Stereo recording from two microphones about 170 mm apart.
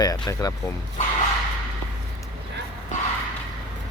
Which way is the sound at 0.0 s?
20° left (ahead or behind).